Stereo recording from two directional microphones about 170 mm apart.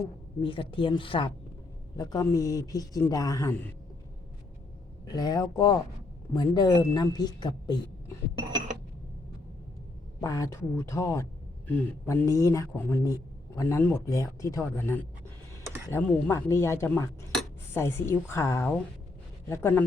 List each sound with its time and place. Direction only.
0.3 s speech: 30° left (ahead or behind)
2.0 s a woman's voice: 20° left (ahead or behind)
5.0 s a woman's voice: 25° left (ahead or behind)
10.2 s speech: 20° left (ahead or behind)